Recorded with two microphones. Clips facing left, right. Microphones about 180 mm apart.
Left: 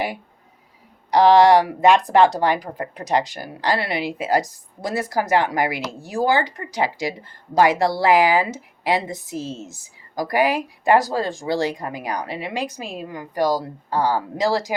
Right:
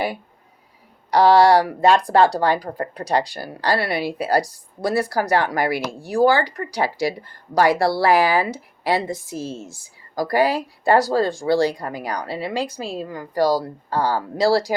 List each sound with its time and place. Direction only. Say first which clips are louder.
1.1 s speech: left 1 dB; 20° left (ahead or behind)